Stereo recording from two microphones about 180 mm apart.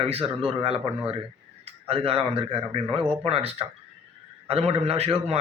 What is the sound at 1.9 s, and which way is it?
A man's voice, 30° right (ahead or behind).